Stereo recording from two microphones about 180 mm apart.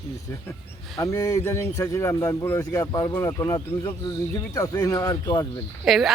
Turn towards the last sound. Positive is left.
turn(degrees=0)  # may be behind; listen again after turning